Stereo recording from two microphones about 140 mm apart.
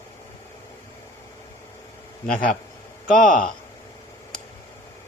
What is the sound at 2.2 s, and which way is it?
A man's voice, 75° left (ahead or behind).